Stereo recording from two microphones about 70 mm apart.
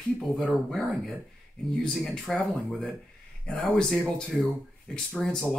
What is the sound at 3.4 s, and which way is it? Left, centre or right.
Speech, centre.